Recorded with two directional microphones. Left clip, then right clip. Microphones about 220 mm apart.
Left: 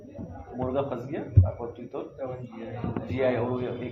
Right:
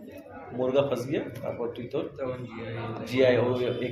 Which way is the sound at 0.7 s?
60° right (ahead or behind).